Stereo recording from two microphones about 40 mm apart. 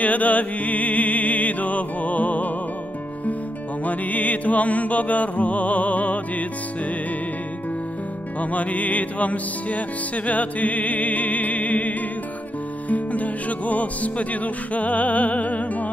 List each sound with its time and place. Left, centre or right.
0.0 s music: left
3.8 s music: left
8.4 s music: left